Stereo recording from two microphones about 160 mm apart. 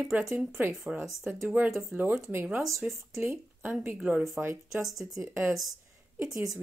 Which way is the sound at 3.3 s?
15° right (ahead or behind).